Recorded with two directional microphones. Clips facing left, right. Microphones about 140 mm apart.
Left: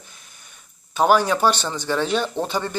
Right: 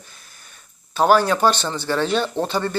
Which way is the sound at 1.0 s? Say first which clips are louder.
Right 1 dB; 15° left (ahead or behind).